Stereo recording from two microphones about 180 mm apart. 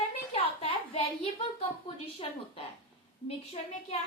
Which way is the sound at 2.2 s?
30° left (ahead or behind).